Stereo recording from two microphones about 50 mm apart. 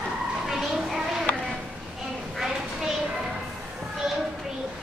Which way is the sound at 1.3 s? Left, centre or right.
Left.